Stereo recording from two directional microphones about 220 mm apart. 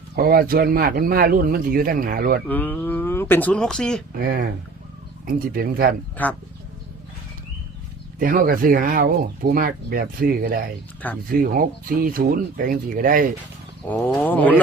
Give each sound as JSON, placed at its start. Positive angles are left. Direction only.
{"t": 0.2, "sound": "speech", "side_deg": -45}
{"t": 2.5, "sound": "speech", "side_deg": 10}
{"t": 4.2, "sound": "speech", "side_deg": -45}
{"t": 6.2, "sound": "speech", "side_deg": 10}
{"t": 8.2, "sound": "speech", "side_deg": -40}
{"t": 13.8, "sound": "speech", "side_deg": 5}